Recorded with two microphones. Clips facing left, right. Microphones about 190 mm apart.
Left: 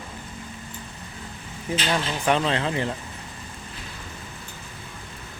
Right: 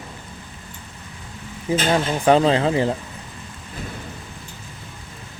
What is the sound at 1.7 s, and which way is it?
Speech, 50° right (ahead or behind).